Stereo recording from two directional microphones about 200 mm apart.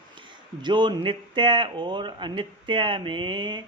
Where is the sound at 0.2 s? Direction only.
25° right (ahead or behind).